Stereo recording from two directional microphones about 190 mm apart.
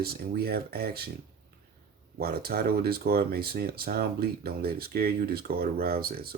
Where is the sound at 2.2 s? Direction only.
55° right (ahead or behind).